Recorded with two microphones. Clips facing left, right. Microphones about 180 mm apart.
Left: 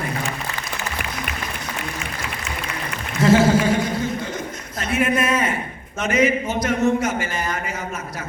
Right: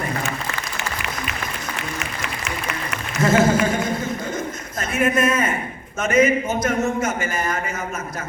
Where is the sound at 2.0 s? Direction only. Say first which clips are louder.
Right 1 dB; 75° right (ahead or behind).